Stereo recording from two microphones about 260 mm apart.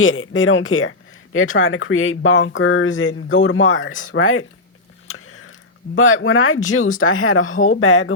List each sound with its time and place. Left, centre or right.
0.0 s speech: left